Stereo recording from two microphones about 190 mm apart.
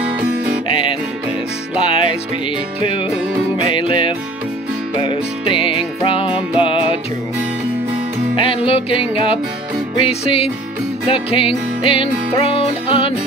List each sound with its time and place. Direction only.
0.7 s music: 25° left (ahead or behind)
8.4 s music: 30° left (ahead or behind)